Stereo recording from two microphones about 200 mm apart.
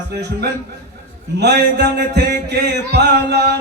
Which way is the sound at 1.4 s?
55° right (ahead or behind).